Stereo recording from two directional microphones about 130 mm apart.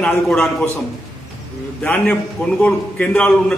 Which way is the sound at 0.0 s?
5° left (ahead or behind).